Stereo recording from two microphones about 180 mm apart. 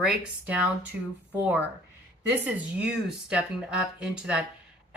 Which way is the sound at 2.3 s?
10° right (ahead or behind).